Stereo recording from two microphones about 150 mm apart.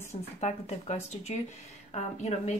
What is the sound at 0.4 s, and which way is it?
A woman's voice, 50° left (ahead or behind).